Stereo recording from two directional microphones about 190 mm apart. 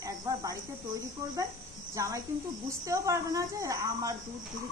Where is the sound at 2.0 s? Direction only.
15° right (ahead or behind).